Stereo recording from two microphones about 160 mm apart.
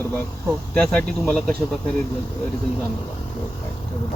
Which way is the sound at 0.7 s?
5° left (ahead or behind).